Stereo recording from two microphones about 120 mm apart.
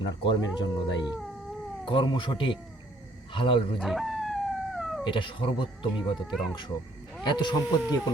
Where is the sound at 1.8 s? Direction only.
45° left (ahead or behind).